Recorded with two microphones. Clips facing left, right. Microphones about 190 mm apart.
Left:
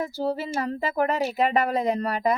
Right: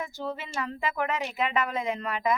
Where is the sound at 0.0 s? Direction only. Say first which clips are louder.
Left 7 dB; 35° left (ahead or behind).